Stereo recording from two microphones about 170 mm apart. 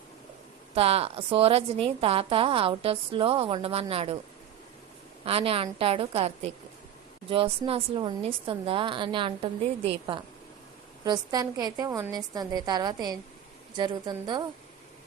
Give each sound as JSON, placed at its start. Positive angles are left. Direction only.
{"t": 0.8, "sound": "a woman's voice", "side_deg": -35}
{"t": 5.2, "sound": "a woman's voice", "side_deg": -35}